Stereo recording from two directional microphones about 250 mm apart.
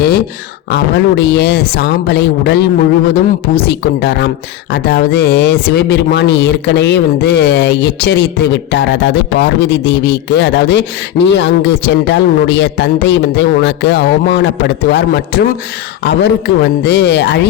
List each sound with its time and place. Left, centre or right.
0.7 s a woman's voice: left